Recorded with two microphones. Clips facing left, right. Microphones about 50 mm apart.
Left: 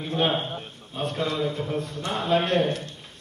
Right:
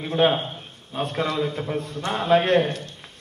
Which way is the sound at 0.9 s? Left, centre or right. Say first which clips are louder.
Right 2 dB; right.